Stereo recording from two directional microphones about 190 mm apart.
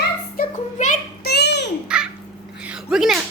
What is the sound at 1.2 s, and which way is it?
Babbling, 60° left (ahead or behind).